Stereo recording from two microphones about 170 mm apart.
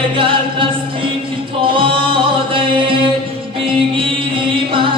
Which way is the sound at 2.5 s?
30° right (ahead or behind).